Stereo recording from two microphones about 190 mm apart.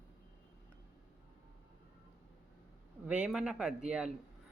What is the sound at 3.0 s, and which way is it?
Speech, 5° right (ahead or behind).